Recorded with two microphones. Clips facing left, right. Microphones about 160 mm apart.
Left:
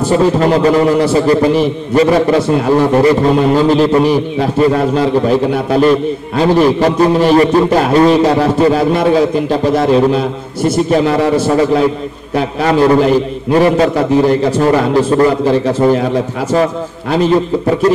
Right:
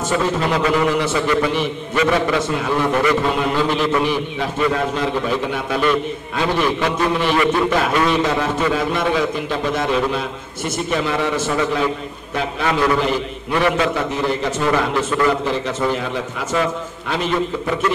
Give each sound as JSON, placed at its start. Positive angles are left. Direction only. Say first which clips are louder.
{"t": 0.0, "sound": "a man's voice", "louder": "left 9 dB", "side_deg": 35}
{"t": 12.6, "sound": "a man's voice", "louder": "left 9 dB", "side_deg": 35}
{"t": 17.1, "sound": "a man's voice", "louder": "left 9 dB", "side_deg": 35}